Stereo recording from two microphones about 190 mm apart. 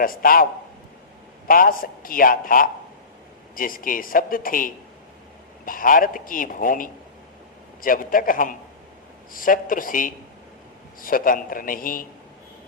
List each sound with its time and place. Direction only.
0.0 s a man's voice: 50° left (ahead or behind)
1.5 s a man's voice: 50° left (ahead or behind)